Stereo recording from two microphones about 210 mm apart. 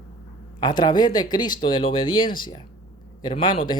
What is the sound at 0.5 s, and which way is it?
Speech, 20° left (ahead or behind).